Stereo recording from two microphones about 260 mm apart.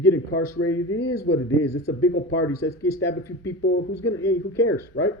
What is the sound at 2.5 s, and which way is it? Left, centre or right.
Speech, centre.